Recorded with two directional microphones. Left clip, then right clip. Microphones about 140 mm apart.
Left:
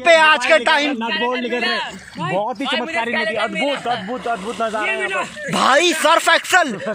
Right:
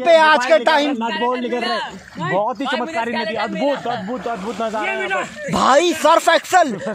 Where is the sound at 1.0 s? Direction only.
50° right (ahead or behind).